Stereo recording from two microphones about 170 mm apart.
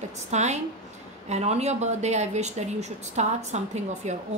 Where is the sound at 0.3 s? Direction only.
40° right (ahead or behind).